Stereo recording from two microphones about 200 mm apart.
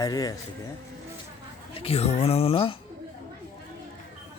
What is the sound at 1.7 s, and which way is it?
Speech, 30° left (ahead or behind).